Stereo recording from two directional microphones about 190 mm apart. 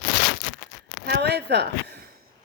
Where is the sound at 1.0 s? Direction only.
60° right (ahead or behind).